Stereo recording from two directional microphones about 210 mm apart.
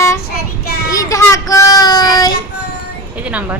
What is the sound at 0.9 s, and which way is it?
Child singing, 15° left (ahead or behind).